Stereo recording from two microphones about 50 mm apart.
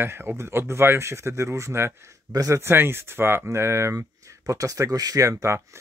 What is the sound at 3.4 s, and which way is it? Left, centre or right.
Speech, right.